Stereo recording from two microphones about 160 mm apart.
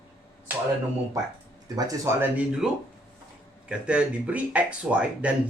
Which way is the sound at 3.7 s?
5° right (ahead or behind).